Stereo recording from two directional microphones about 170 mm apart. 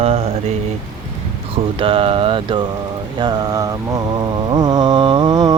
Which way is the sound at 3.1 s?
25° right (ahead or behind).